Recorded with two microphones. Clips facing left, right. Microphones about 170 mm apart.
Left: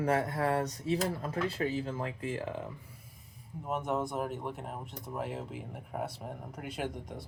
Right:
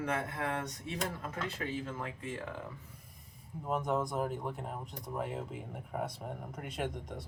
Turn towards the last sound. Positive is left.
turn(degrees=0)  # may be behind; listen again after turning